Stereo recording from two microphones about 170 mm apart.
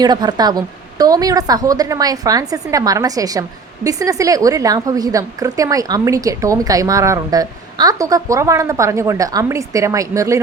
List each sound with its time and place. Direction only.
0.0 s a woman's voice: 25° right (ahead or behind)